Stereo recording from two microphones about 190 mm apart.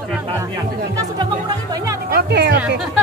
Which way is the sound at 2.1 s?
60° right (ahead or behind).